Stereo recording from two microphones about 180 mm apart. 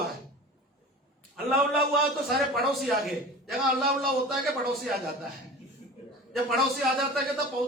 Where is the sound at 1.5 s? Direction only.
55° right (ahead or behind).